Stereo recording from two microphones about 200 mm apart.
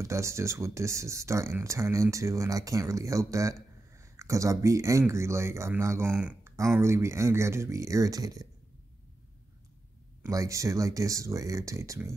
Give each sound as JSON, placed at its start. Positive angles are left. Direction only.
{"t": 0.0, "sound": "speech", "side_deg": -15}
{"t": 10.2, "sound": "speech", "side_deg": -15}